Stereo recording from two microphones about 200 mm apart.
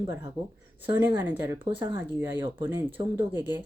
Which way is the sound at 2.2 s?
10° right (ahead or behind).